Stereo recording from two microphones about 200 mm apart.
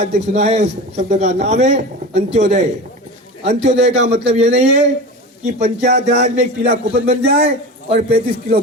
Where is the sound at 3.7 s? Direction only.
60° right (ahead or behind).